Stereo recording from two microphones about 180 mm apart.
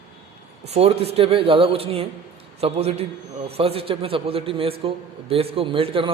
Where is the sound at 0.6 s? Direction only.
35° right (ahead or behind).